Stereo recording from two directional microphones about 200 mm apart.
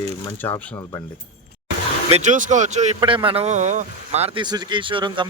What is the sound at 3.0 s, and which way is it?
Speech, 25° right (ahead or behind).